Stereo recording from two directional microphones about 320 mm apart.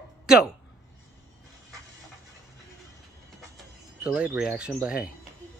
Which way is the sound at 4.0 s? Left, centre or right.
Centre.